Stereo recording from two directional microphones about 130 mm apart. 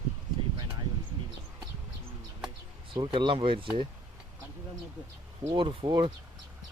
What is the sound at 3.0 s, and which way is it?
Speech, 40° right (ahead or behind).